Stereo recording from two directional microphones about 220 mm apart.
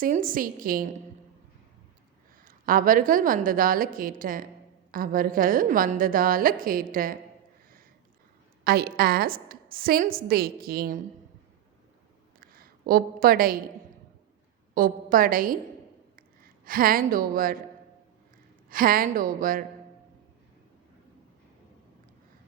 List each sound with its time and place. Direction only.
0.0 s a woman's voice: 40° right (ahead or behind)
2.4 s a woman's voice: 40° right (ahead or behind)
8.6 s a woman's voice: 45° right (ahead or behind)
12.5 s a woman's voice: 40° right (ahead or behind)
14.8 s a woman's voice: 40° right (ahead or behind)
16.6 s a woman's voice: 40° right (ahead or behind)
18.7 s a woman's voice: 40° right (ahead or behind)